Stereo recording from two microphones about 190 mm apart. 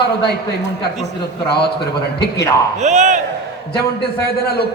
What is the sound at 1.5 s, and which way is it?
Speech, 60° left (ahead or behind).